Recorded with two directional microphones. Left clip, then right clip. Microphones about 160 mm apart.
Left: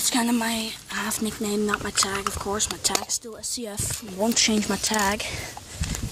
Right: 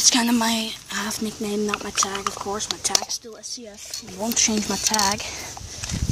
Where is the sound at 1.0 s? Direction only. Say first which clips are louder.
Even; centre (ahead or behind).